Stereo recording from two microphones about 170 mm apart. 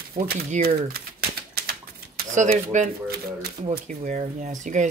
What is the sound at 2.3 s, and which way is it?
Speech, 45° right (ahead or behind).